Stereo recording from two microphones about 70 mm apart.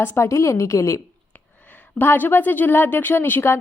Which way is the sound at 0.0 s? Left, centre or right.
Left.